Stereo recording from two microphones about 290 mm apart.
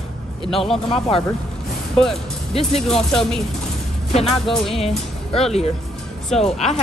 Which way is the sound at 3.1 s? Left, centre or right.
Centre.